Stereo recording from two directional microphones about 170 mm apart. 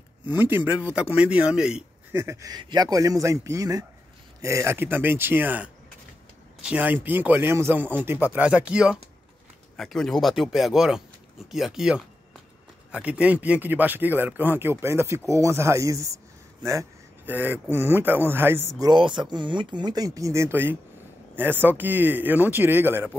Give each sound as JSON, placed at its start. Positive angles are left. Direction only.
{"t": 0.4, "sound": "speech", "side_deg": -10}
{"t": 2.2, "sound": "speech", "side_deg": -20}
{"t": 17.3, "sound": "speech", "side_deg": -10}
{"t": 18.8, "sound": "speech", "side_deg": -25}